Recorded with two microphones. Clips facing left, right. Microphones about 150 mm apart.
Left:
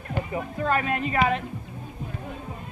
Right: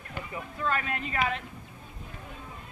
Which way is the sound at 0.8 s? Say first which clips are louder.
Left 7 dB; 20° left (ahead or behind).